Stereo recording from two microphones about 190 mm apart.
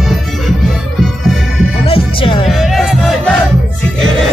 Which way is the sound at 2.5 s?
Centre (ahead or behind).